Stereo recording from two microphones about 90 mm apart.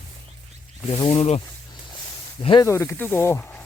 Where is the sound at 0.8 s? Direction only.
85° left.